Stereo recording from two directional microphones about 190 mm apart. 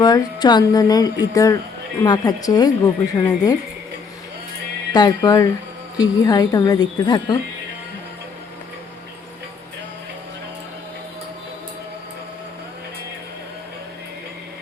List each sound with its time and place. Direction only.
0.0 s speech: 20° left (ahead or behind)
4.9 s speech: 20° left (ahead or behind)